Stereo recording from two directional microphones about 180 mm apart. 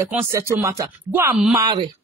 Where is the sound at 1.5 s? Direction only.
25° right (ahead or behind).